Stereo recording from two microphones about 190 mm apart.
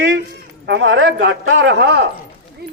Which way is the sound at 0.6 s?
75° right (ahead or behind).